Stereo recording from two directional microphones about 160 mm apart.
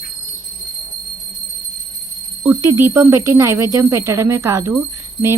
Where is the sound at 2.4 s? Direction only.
15° right (ahead or behind).